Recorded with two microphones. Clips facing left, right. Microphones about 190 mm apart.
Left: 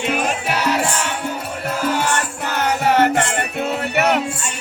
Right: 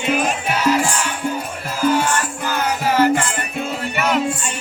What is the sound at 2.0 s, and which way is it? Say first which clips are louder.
Music: right 1 dB; 65° left (ahead or behind).